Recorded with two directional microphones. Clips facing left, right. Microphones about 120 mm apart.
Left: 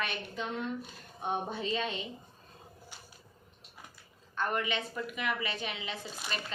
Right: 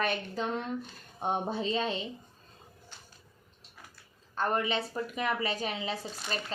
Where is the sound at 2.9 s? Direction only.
10° left (ahead or behind).